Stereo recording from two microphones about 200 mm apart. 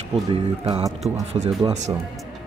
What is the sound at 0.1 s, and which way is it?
Speech, 30° right (ahead or behind).